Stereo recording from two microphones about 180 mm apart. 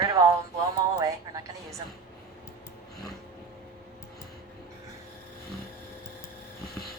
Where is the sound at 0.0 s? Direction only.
20° right (ahead or behind).